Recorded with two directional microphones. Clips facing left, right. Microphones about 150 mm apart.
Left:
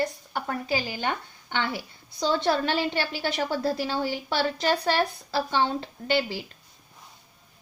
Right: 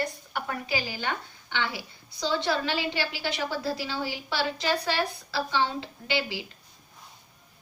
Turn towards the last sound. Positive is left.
turn(degrees=45)  # may be behind; listen again after turning